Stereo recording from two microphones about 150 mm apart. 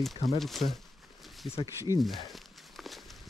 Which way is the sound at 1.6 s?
20° right (ahead or behind).